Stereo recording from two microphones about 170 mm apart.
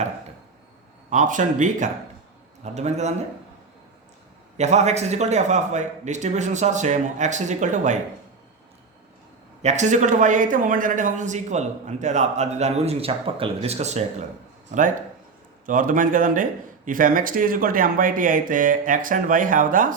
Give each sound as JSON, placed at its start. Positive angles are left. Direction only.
{"t": 1.1, "sound": "a man's voice", "side_deg": -45}
{"t": 4.5, "sound": "speech", "side_deg": -40}
{"t": 9.6, "sound": "speech", "side_deg": -40}
{"t": 15.6, "sound": "speech", "side_deg": -50}